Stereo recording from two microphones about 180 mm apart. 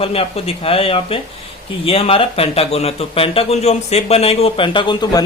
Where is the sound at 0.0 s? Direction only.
30° left (ahead or behind).